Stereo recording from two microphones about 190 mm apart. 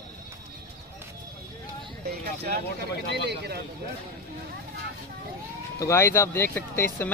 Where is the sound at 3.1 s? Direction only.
60° right (ahead or behind).